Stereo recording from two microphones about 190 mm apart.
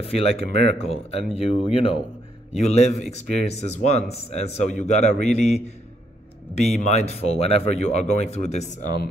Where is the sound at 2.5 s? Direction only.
35° left (ahead or behind).